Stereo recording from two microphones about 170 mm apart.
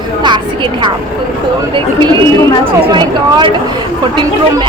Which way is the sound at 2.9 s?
25° right (ahead or behind).